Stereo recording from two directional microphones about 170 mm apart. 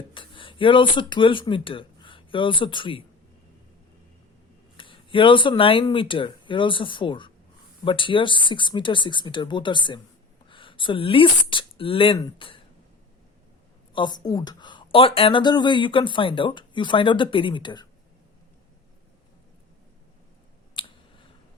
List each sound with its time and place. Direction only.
0.1 s speech: 30° left (ahead or behind)
4.8 s speech: 30° left (ahead or behind)
13.9 s speech: 25° left (ahead or behind)
20.8 s a sound: 30° left (ahead or behind)